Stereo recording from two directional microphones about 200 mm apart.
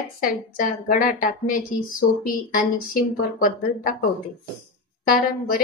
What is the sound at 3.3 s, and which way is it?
A woman's voice, 45° left (ahead or behind).